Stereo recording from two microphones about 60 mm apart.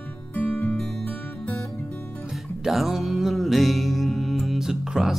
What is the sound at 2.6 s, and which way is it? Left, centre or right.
Music, centre.